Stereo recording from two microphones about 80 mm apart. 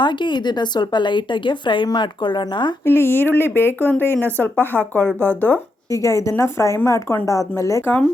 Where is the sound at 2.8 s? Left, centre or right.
Left.